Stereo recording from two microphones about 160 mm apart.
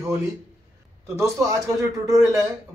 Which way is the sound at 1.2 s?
20° right (ahead or behind).